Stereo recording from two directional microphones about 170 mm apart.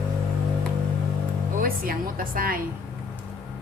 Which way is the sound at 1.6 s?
60° right (ahead or behind).